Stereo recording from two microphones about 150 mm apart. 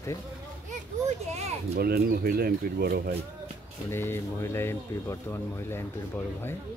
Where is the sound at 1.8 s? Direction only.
90° right.